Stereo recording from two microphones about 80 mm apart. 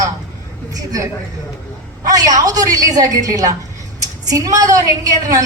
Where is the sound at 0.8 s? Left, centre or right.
Right.